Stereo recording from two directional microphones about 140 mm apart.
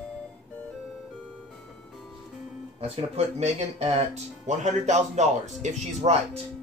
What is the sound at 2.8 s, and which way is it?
Speech, 50° right (ahead or behind).